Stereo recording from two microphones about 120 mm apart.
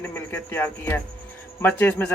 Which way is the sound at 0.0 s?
15° left (ahead or behind).